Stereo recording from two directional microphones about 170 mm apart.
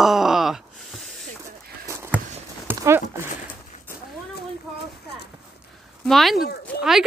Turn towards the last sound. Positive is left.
turn(degrees=0)  # may be behind; listen again after turning